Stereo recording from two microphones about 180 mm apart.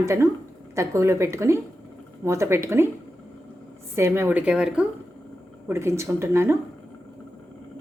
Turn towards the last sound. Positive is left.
turn(degrees=-15)  # may be behind; listen again after turning